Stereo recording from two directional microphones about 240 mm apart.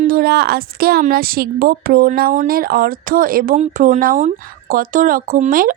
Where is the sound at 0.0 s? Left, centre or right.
Right.